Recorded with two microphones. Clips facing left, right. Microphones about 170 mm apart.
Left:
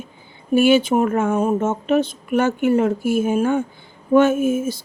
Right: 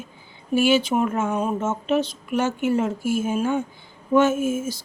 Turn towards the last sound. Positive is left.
turn(degrees=55)  # may be behind; listen again after turning